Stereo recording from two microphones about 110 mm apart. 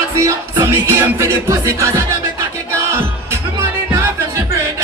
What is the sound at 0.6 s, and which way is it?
Music, 25° right (ahead or behind).